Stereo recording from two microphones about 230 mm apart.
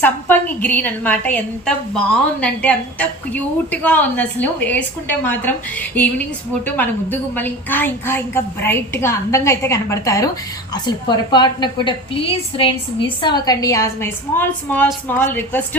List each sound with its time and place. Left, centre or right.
0.0 s a woman's voice: centre